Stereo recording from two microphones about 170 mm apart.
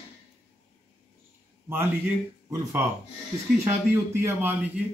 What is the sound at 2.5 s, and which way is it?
A man's voice, 15° right (ahead or behind).